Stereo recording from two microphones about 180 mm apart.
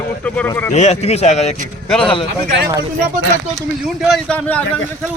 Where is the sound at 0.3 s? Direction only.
10° left (ahead or behind).